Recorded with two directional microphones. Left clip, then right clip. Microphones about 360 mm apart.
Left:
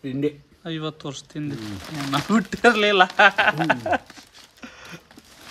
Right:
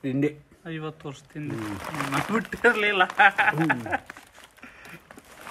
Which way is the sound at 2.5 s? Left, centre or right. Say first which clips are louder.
Left 4 dB; centre.